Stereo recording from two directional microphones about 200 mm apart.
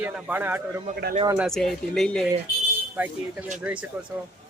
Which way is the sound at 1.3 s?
Centre (ahead or behind).